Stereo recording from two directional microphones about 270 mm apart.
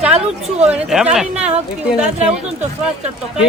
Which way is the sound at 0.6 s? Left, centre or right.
Centre.